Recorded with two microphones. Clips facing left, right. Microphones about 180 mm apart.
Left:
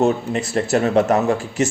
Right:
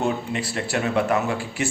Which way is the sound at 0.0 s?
40° left (ahead or behind).